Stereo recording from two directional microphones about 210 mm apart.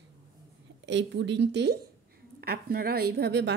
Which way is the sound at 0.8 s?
55° right (ahead or behind).